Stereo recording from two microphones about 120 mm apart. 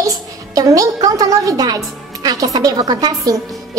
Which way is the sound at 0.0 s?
30° right (ahead or behind).